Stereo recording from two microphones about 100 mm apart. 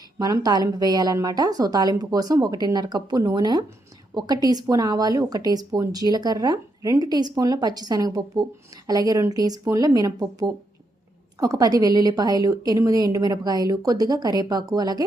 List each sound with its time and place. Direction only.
0.2 s a woman's voice: 35° right (ahead or behind)